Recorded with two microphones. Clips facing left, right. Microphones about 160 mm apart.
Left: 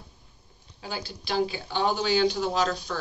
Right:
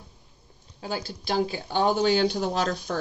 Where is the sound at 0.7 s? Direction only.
45° right (ahead or behind).